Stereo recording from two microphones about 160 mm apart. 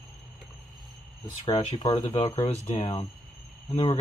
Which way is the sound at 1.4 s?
25° left (ahead or behind).